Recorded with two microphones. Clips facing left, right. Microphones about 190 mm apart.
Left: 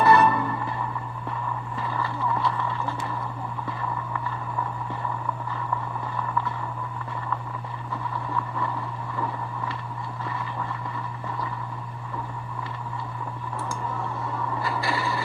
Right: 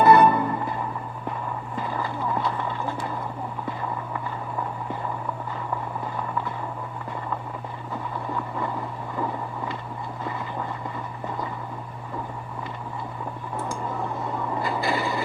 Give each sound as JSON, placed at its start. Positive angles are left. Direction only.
{"t": 0.0, "sound": "music", "side_deg": -25}
{"t": 2.2, "sound": "vehicle", "side_deg": -25}
{"t": 8.3, "sound": "vehicle", "side_deg": -25}
{"t": 14.6, "sound": "a sound", "side_deg": -20}